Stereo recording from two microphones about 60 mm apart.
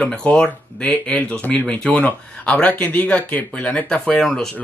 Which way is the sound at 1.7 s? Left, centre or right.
Left.